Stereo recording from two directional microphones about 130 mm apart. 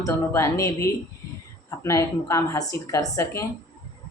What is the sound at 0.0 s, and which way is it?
Speech, 20° left (ahead or behind).